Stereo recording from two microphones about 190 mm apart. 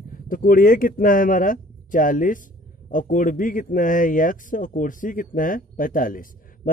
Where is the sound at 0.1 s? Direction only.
50° left (ahead or behind).